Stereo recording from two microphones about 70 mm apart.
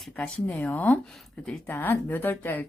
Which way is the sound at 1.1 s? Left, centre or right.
Centre.